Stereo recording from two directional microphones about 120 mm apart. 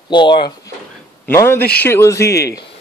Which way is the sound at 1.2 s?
20° left (ahead or behind).